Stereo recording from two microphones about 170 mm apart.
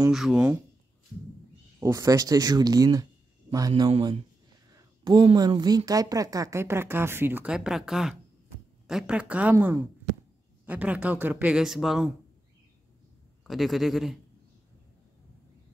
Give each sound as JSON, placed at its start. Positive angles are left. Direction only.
{"t": 0.1, "sound": "speech", "side_deg": -5}
{"t": 1.8, "sound": "speech", "side_deg": -20}
{"t": 13.5, "sound": "a man's voice", "side_deg": 0}